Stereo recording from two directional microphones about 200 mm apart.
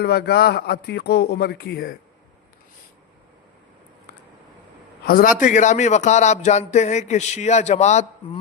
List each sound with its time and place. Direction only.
0.0 s speech: 50° left (ahead or behind)
5.0 s a man's voice: 45° left (ahead or behind)